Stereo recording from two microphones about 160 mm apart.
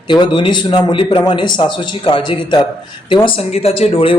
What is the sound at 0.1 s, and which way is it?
A man's voice, 30° left (ahead or behind).